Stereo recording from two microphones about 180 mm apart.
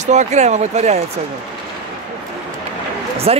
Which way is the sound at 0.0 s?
40° right (ahead or behind).